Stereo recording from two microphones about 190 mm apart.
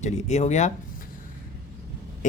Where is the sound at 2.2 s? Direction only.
40° left (ahead or behind).